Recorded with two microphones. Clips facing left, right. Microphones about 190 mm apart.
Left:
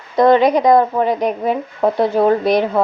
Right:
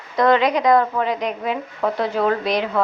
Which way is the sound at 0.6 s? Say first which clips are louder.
Left 4 dB; 25° left (ahead or behind).